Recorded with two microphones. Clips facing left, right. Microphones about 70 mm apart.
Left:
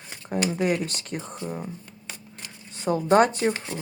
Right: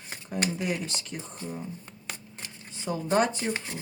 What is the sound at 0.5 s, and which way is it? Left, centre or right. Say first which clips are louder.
Speech: left 6 dB; left.